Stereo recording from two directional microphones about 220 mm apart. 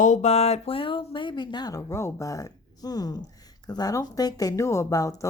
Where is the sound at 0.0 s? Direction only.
35° left (ahead or behind).